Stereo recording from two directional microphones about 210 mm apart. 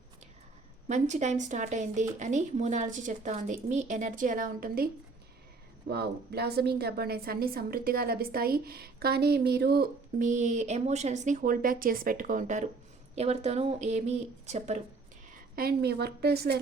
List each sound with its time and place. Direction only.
0.9 s speech: 35° right (ahead or behind)
5.9 s a woman's voice: 50° right (ahead or behind); by 14.8 s 30° right (ahead or behind)
15.5 s a woman's voice: 50° right (ahead or behind)